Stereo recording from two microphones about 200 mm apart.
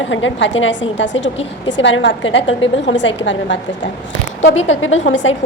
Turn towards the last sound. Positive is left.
turn(degrees=65)  # may be behind; listen again after turning